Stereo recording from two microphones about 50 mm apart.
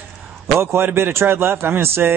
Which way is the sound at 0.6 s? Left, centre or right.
Right.